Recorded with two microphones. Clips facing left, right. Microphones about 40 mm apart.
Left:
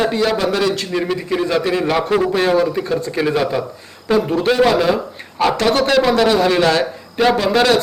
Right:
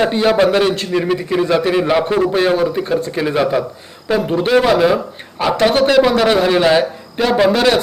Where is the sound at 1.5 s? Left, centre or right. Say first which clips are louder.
Right 3 dB; centre.